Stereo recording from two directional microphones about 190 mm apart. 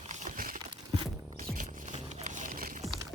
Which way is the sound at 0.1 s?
40° right (ahead or behind).